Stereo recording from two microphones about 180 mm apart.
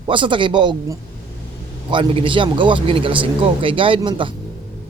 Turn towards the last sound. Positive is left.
turn(degrees=-25)  # may be behind; listen again after turning